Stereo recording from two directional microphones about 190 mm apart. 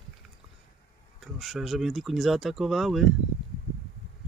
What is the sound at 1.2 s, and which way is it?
Speech, centre (ahead or behind).